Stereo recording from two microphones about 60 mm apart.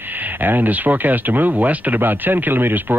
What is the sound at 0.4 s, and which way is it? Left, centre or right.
Speech, right.